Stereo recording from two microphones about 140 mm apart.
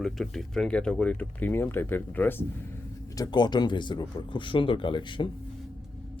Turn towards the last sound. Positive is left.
turn(degrees=35)  # may be behind; listen again after turning